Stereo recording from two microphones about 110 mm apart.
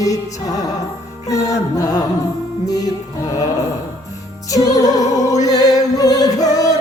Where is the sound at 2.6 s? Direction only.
35° left (ahead or behind).